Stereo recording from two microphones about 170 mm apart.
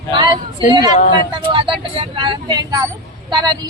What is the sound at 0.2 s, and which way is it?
Speech, 25° right (ahead or behind).